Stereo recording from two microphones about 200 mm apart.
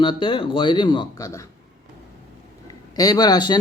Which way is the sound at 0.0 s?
25° left (ahead or behind).